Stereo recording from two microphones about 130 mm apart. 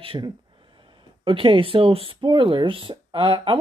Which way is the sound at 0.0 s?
40° right (ahead or behind).